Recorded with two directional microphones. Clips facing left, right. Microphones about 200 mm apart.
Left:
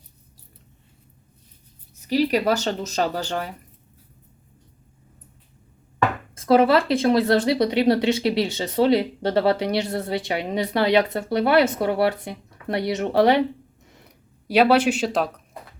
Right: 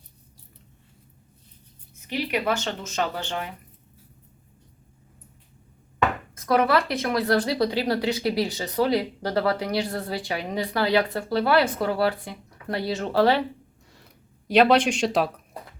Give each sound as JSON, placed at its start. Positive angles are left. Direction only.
{"t": 2.0, "sound": "speech", "side_deg": 35}
{"t": 6.3, "sound": "speech", "side_deg": 25}
{"t": 14.4, "sound": "speech", "side_deg": 10}